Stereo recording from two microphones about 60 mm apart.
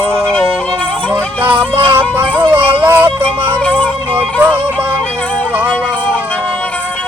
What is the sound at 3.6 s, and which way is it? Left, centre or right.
Music, centre.